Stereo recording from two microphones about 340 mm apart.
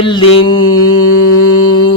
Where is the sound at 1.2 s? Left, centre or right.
Left.